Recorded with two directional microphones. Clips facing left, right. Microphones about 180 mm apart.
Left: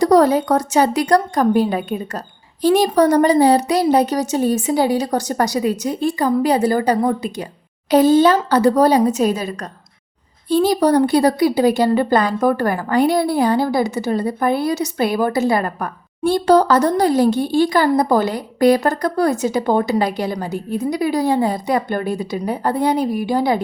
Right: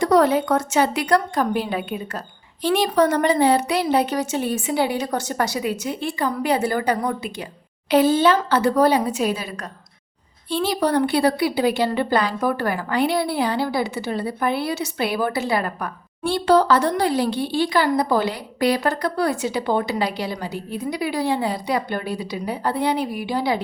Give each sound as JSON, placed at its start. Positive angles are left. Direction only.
{"t": 0.0, "sound": "a woman's voice", "side_deg": 35}